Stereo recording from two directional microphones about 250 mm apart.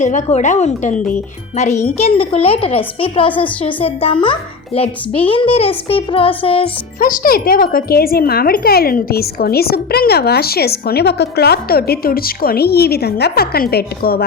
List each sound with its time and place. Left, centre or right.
0.0 s speech: left
7.0 s speech: left